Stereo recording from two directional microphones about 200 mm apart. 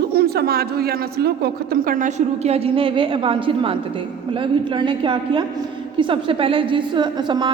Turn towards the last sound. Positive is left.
turn(degrees=-20)  # may be behind; listen again after turning